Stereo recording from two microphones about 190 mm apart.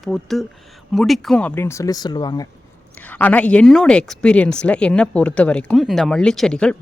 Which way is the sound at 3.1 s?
10° left (ahead or behind).